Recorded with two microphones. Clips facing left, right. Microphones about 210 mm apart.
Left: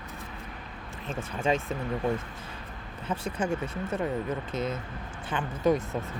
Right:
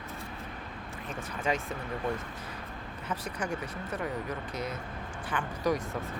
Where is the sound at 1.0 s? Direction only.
25° left (ahead or behind).